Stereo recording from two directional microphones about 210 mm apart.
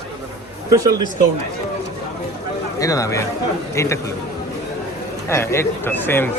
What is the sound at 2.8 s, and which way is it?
Speech, 15° left (ahead or behind).